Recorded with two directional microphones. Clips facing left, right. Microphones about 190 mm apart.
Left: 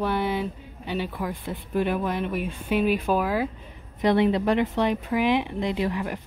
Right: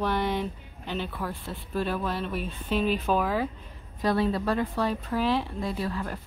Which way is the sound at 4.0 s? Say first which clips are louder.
Left 5 dB; 20° left (ahead or behind).